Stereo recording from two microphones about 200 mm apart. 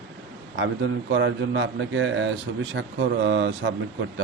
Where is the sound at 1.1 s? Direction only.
65° right (ahead or behind).